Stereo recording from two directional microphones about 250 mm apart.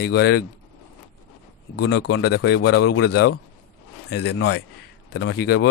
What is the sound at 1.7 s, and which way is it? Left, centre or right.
A man's voice, left.